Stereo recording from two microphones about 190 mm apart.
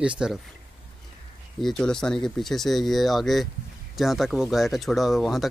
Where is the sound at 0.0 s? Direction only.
5° right (ahead or behind).